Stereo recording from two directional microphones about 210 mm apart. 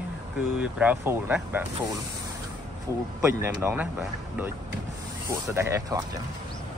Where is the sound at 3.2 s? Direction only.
10° right (ahead or behind).